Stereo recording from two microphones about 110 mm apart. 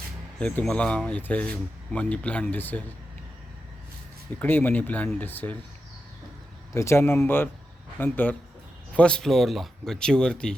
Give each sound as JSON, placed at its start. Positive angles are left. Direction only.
{"t": 0.3, "sound": "speech", "side_deg": 10}
{"t": 4.4, "sound": "speech", "side_deg": 20}
{"t": 6.7, "sound": "speech", "side_deg": 25}